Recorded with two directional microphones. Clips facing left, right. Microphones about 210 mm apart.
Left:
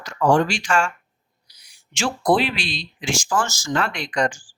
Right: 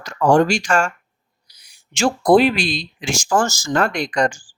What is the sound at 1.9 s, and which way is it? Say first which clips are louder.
Speech: right 6 dB; 45° right (ahead or behind).